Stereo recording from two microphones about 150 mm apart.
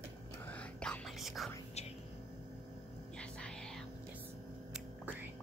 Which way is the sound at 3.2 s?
5° left (ahead or behind).